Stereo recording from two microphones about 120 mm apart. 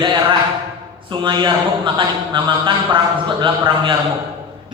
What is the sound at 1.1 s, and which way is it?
A man's voice, 40° right (ahead or behind).